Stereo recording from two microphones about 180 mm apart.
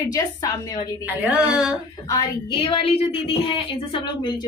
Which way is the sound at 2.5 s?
30° left (ahead or behind).